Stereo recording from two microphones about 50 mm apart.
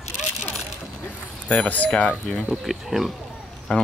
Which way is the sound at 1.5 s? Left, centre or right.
Left.